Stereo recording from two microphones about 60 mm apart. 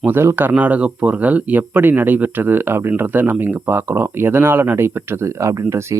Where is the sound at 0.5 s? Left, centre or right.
Right.